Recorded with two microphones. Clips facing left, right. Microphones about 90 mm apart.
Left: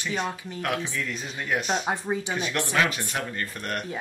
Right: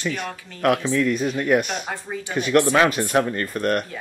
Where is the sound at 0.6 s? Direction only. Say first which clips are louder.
Right 10 dB; 65° right (ahead or behind).